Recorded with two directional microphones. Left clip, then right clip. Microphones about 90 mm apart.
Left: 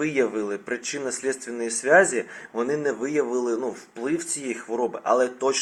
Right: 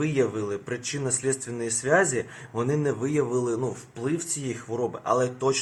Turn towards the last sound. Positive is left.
turn(degrees=-25)  # may be behind; listen again after turning